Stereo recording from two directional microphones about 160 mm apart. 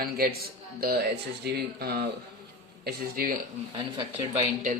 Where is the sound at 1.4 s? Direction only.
85° right.